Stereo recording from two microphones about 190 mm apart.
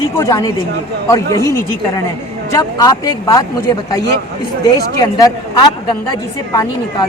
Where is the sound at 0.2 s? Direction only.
15° left (ahead or behind).